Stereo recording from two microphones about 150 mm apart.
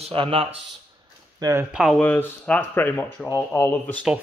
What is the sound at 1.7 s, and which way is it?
Speech, centre (ahead or behind).